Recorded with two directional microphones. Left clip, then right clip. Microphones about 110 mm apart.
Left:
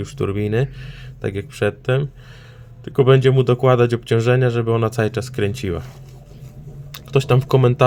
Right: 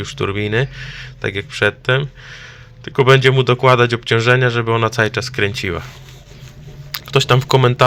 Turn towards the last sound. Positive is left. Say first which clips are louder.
# right 3 dB
turn(degrees=35)  # may be behind; listen again after turning